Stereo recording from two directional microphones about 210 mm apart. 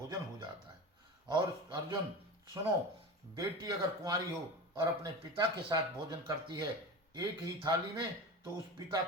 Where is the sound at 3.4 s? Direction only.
15° right (ahead or behind).